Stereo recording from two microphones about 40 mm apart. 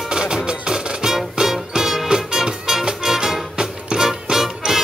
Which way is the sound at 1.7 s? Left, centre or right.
Centre.